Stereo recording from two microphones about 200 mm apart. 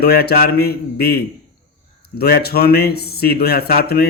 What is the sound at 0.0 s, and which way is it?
Speech, 50° left (ahead or behind).